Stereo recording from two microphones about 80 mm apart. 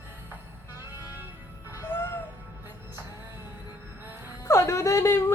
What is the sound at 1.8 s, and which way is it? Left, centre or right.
Music, left.